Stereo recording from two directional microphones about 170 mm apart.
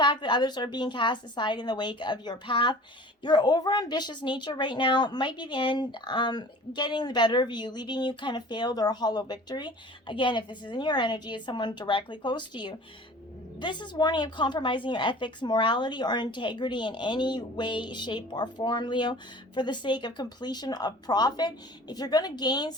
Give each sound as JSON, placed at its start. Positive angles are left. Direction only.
{"t": 0.0, "sound": "speech", "side_deg": 25}